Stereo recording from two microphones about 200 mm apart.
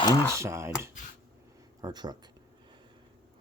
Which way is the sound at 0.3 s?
15° right (ahead or behind).